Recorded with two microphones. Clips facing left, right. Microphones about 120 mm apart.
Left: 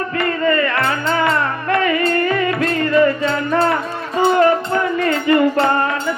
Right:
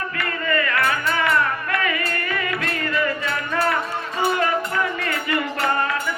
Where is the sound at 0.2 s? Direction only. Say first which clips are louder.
Left 8 dB; 35° left (ahead or behind).